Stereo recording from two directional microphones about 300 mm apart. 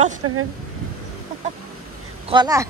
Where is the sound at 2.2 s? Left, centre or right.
Centre.